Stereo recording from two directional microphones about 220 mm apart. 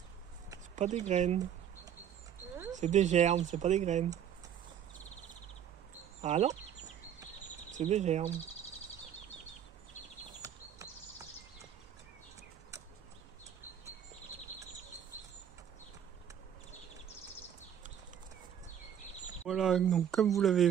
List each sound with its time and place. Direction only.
0.7 s speech: 30° right (ahead or behind)
2.7 s speech: 35° right (ahead or behind)
6.2 s speech: 30° right (ahead or behind)
7.7 s speech: 30° right (ahead or behind)
10.4 s a sound: 15° right (ahead or behind)
19.4 s speech: centre (ahead or behind)